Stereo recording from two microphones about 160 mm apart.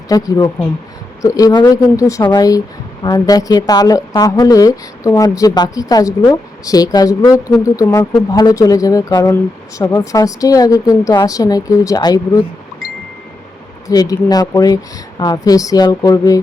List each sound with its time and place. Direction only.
0.1 s a woman's voice: 20° left (ahead or behind)
13.8 s a woman's voice: 25° left (ahead or behind)